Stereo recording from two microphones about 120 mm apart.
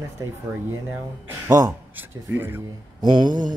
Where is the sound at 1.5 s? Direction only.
30° right (ahead or behind).